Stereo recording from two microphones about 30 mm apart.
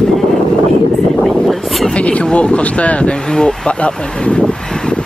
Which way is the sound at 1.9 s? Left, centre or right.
Left.